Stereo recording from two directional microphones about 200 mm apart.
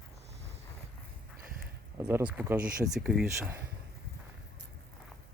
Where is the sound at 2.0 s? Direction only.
10° right (ahead or behind).